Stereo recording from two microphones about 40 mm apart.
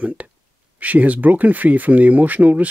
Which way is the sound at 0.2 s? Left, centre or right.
Right.